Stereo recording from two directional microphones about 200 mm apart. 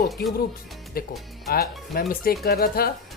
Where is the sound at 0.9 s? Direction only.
50° left (ahead or behind).